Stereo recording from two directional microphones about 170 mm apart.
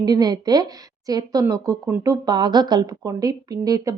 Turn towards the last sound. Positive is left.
turn(degrees=-20)  # may be behind; listen again after turning